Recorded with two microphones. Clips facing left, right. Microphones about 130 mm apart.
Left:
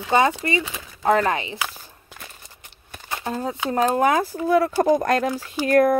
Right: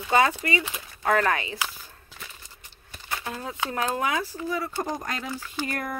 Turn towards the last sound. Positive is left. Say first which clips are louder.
# left 14 dB
turn(degrees=85)